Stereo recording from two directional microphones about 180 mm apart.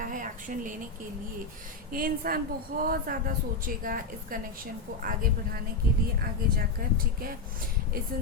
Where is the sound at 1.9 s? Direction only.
55° right (ahead or behind).